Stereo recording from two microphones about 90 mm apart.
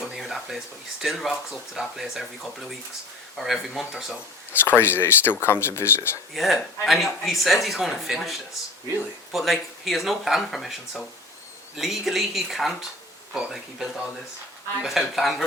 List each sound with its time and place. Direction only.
0.0 s a sound: 5° right (ahead or behind)
1.0 s a man's voice: centre (ahead or behind)
4.6 s speech: 25° left (ahead or behind)
6.3 s a man's voice: centre (ahead or behind)